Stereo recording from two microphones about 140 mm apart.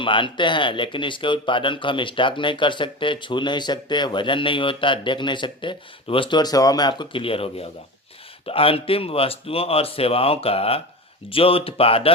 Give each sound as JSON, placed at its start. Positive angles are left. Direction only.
{"t": 0.0, "sound": "speech", "side_deg": 35}